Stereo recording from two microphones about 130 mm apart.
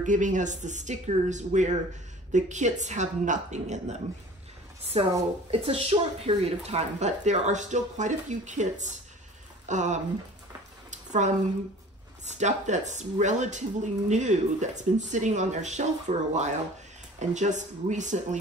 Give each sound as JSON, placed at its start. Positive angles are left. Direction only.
{"t": 0.0, "sound": "speech", "side_deg": -75}
{"t": 4.9, "sound": "a woman's voice", "side_deg": -45}
{"t": 10.9, "sound": "a sound", "side_deg": -65}
{"t": 12.3, "sound": "speech", "side_deg": -65}